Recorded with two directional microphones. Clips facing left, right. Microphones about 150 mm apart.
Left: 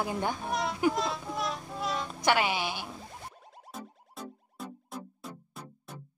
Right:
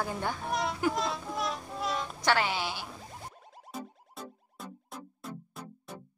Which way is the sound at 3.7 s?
Centre (ahead or behind).